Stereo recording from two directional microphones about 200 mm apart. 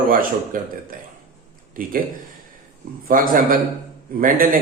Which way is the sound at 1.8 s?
45° right (ahead or behind).